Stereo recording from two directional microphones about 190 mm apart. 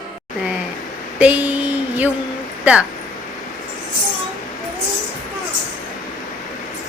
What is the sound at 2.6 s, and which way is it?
Speech, 5° right (ahead or behind).